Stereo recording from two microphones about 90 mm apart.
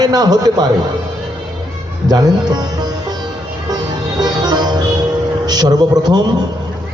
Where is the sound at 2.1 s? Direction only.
50° right (ahead or behind).